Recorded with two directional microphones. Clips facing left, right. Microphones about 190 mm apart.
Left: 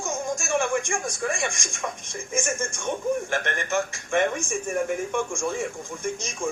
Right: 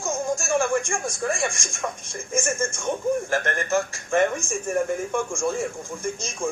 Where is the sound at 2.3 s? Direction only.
15° left (ahead or behind).